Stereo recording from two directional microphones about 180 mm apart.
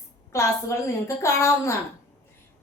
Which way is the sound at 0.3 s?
15° left (ahead or behind).